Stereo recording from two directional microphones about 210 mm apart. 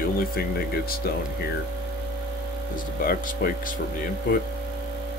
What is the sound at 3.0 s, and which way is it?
Speech, 40° left (ahead or behind).